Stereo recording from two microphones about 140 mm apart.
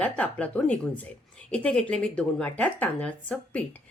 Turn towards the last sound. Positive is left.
turn(degrees=10)  # may be behind; listen again after turning